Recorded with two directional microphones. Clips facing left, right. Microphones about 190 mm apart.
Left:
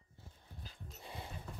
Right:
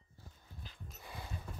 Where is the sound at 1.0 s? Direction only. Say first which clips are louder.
Left 1 dB; 25° left (ahead or behind).